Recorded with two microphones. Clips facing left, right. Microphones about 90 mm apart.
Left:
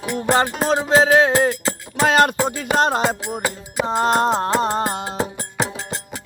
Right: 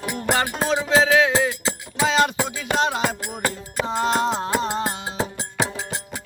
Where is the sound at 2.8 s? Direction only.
45° left (ahead or behind).